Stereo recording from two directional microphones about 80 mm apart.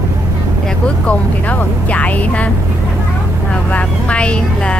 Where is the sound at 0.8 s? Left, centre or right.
Centre.